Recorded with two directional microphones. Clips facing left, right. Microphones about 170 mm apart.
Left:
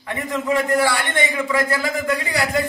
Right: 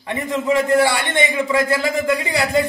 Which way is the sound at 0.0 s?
25° right (ahead or behind).